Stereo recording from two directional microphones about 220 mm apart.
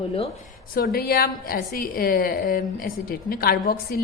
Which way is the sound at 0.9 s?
40° left (ahead or behind).